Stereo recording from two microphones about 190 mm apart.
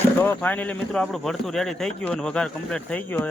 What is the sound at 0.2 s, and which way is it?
Speech, 10° left (ahead or behind).